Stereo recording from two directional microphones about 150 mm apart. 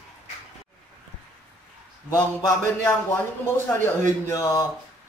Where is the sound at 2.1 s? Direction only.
20° left (ahead or behind).